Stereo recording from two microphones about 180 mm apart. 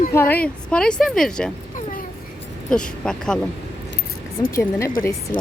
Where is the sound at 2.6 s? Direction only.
5° left (ahead or behind).